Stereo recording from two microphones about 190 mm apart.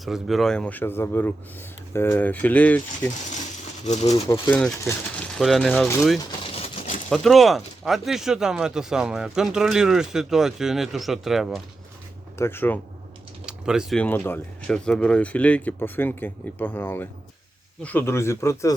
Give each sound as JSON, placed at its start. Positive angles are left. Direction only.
{"t": 0.0, "sound": "speech", "side_deg": 0}
{"t": 3.8, "sound": "speech", "side_deg": 35}
{"t": 4.5, "sound": "speech", "side_deg": 10}
{"t": 5.3, "sound": "speech", "side_deg": 0}
{"t": 6.1, "sound": "a sound", "side_deg": 30}
{"t": 7.1, "sound": "speech", "side_deg": 0}
{"t": 12.4, "sound": "speech", "side_deg": 10}
{"t": 13.4, "sound": "typing", "side_deg": -5}
{"t": 14.0, "sound": "speech", "side_deg": 10}